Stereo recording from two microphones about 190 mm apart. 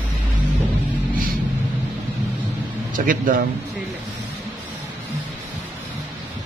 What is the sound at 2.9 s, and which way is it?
Speech, 45° right (ahead or behind).